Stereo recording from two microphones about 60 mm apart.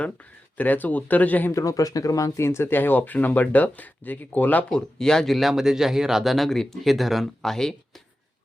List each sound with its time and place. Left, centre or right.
0.5 s speech: left
1.5 s speech: left
2.4 s speech: left
4.7 s speech: centre